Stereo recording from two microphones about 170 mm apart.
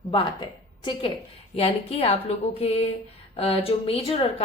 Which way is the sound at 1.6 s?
35° left (ahead or behind).